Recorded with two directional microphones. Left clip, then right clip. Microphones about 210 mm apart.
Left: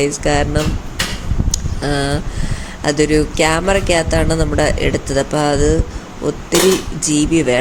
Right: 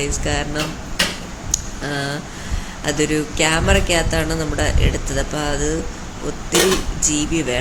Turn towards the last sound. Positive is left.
turn(degrees=25)  # may be behind; listen again after turning